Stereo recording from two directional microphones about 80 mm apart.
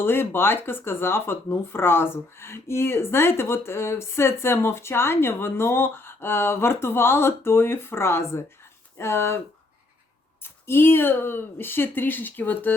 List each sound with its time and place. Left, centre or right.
0.0 s speech: left
10.4 s speech: left